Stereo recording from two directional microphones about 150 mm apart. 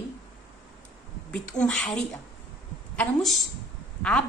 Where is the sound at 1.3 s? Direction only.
5° left (ahead or behind).